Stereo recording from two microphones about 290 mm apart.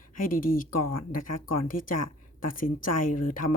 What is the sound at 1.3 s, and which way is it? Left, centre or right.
Speech, left.